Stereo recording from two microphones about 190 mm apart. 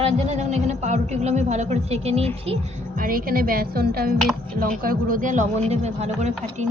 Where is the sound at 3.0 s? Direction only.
50° right (ahead or behind).